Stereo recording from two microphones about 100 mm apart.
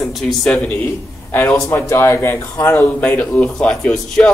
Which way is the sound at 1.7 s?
25° left (ahead or behind).